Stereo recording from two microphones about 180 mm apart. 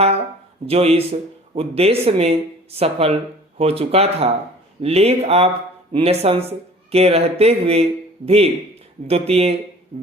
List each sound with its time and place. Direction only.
0.6 s speech: 35° right (ahead or behind)
9.9 s music: 30° right (ahead or behind)